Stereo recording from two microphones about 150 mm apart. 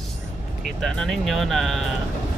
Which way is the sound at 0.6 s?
Centre (ahead or behind).